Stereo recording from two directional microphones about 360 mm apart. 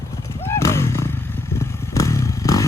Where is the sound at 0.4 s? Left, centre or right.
Centre.